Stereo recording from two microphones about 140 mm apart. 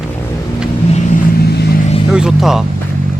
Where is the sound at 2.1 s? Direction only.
5° right (ahead or behind).